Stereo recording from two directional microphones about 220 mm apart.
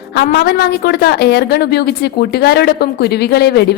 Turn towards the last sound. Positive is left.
turn(degrees=50)  # may be behind; listen again after turning